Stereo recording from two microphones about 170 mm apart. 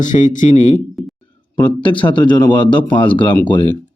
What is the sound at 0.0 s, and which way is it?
Speech, 50° left (ahead or behind).